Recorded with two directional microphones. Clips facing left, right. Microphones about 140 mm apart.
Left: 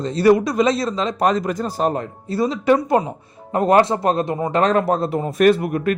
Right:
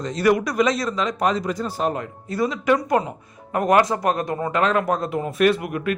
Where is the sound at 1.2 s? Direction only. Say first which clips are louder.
Left 4 dB; 45° left (ahead or behind).